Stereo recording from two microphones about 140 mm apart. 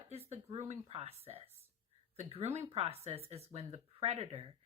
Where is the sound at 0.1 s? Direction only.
45° right (ahead or behind).